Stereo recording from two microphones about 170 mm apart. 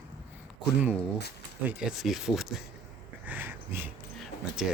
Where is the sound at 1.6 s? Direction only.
5° right (ahead or behind).